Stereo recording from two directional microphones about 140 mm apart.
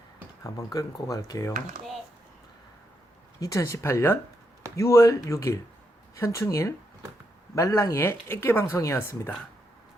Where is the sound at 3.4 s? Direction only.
25° left (ahead or behind).